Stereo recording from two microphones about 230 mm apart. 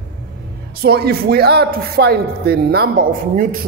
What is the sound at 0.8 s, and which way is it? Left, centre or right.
Speech, right.